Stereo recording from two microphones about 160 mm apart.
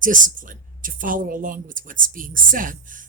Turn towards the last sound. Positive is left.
turn(degrees=-55)  # may be behind; listen again after turning